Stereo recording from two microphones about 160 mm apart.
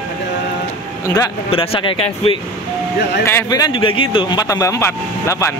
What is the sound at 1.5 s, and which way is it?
Speech, 35° left (ahead or behind).